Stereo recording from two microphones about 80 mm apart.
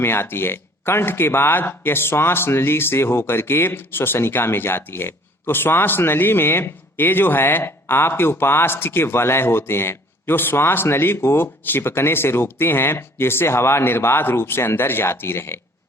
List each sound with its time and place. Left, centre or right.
0.0 s speech: left